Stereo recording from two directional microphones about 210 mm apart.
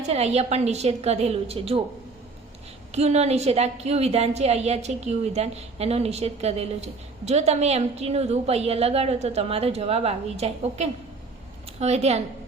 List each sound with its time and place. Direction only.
0.0 s a woman's voice: 30° right (ahead or behind)
2.9 s a woman's voice: 30° right (ahead or behind)